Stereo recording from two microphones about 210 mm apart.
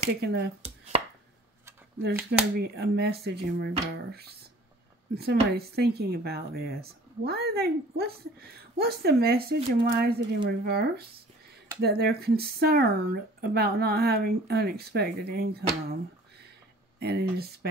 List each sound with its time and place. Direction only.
0.2 s speech: 50° right (ahead or behind)
2.7 s speech: 50° right (ahead or behind)
17.0 s speech: 50° right (ahead or behind)